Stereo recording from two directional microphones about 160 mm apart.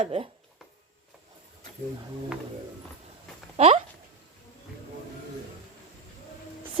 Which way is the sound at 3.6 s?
40° right (ahead or behind).